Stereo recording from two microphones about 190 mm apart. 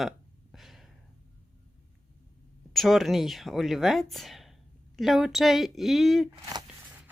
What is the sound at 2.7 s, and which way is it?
Speech, centre (ahead or behind).